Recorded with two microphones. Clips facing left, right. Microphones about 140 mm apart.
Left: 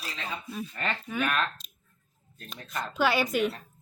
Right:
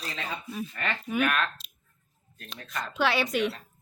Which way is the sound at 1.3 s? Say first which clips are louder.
Even; 40° left (ahead or behind).